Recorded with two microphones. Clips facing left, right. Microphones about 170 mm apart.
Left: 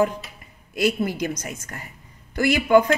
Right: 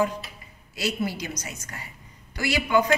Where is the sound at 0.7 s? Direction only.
55° left (ahead or behind).